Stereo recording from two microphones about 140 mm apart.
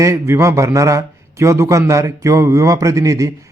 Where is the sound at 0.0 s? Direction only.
20° right (ahead or behind).